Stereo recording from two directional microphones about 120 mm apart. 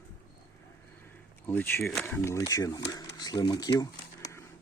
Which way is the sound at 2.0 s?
20° left (ahead or behind).